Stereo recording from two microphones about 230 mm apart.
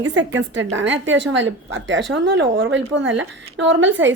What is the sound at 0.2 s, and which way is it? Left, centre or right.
A woman's voice, right.